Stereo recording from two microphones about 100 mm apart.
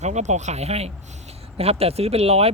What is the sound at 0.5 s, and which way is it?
Speech, 90° right.